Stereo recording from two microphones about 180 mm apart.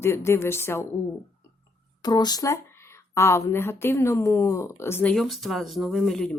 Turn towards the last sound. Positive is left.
turn(degrees=0)  # may be behind; listen again after turning